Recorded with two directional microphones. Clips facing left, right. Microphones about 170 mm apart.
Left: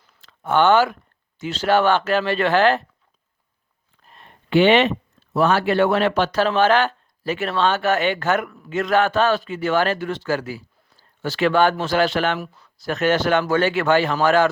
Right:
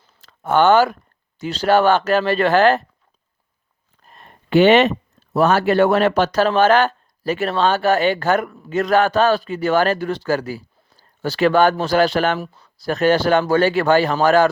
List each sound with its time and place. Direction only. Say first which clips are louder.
0.0 s a sound: right 2 dB; 40° right (ahead or behind)
1.4 s speech: right 3 dB; 35° right (ahead or behind)
4.0 s speech: right 2 dB; 45° right (ahead or behind)
12.4 s speech: right 2 dB; 30° right (ahead or behind)